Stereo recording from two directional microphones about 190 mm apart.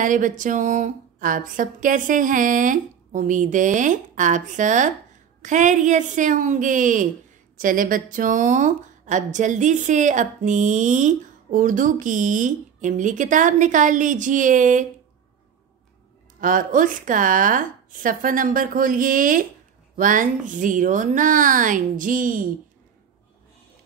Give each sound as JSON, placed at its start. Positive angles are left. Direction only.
{"t": 0.0, "sound": "a woman's voice", "side_deg": -45}
{"t": 16.3, "sound": "a woman's voice", "side_deg": -45}